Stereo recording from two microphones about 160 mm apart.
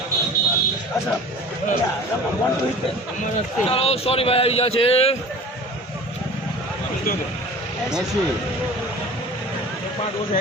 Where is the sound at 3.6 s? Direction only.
40° left (ahead or behind).